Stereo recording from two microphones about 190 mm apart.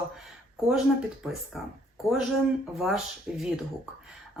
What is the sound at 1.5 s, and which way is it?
Speech, centre (ahead or behind).